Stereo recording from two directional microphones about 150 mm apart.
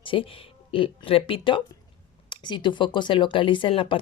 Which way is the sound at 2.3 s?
30° left (ahead or behind).